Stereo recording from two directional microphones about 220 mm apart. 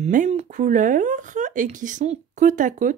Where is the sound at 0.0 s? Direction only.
30° right (ahead or behind).